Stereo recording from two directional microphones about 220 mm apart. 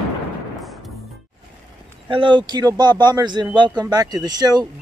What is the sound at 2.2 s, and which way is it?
Speech, 20° right (ahead or behind).